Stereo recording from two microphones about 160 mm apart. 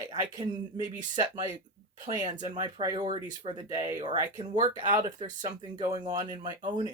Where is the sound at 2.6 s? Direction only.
30° right (ahead or behind).